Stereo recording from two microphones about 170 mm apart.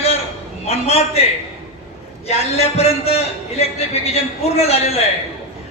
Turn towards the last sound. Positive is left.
turn(degrees=40)  # may be behind; listen again after turning